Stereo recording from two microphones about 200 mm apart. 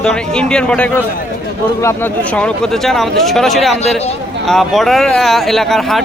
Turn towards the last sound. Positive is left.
turn(degrees=0)  # may be behind; listen again after turning